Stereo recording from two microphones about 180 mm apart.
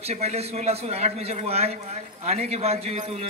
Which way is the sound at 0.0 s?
35° right (ahead or behind).